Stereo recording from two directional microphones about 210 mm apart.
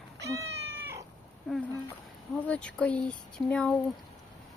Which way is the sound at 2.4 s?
5° left (ahead or behind).